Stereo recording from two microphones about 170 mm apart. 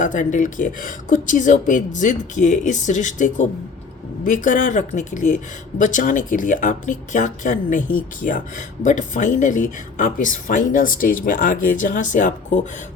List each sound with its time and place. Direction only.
0.0 s speech: 50° left (ahead or behind)